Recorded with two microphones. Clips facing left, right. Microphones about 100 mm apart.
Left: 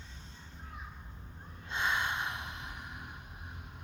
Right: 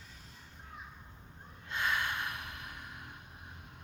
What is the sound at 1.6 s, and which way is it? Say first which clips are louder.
Sigh: left 1 dB; 20° left (ahead or behind).